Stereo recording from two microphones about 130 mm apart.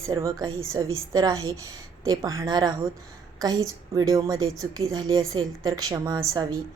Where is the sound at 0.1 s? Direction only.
25° right (ahead or behind).